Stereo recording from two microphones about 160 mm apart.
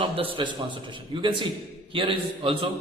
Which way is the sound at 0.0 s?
35° right (ahead or behind).